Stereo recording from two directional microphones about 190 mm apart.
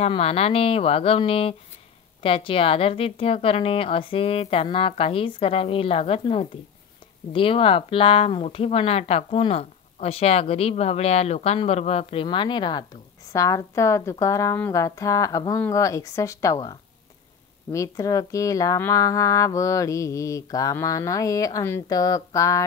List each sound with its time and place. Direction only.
0.0 s a woman's voice: 30° left (ahead or behind)
17.7 s speech: 15° left (ahead or behind)